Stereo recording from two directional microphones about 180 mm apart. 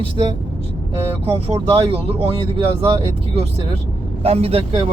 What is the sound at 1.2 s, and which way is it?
Speech, 30° right (ahead or behind).